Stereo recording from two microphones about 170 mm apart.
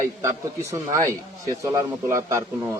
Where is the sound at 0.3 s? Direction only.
15° right (ahead or behind).